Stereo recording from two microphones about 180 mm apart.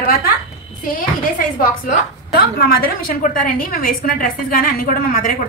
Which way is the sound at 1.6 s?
55° left (ahead or behind).